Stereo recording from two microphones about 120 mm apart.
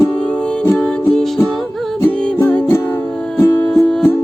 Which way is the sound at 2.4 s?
15° left (ahead or behind).